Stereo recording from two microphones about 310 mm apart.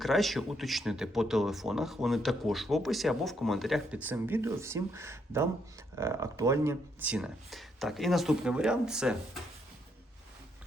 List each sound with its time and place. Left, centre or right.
0.0 s speech: centre